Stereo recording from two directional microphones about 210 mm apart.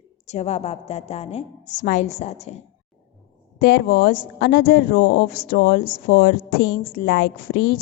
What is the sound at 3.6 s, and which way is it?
Speech, 50° left (ahead or behind).